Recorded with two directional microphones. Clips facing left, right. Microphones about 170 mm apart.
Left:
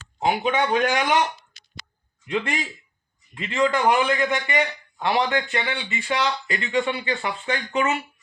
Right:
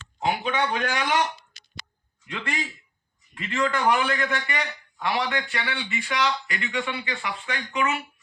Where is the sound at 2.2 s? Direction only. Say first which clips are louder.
Left 6 dB; 20° left (ahead or behind).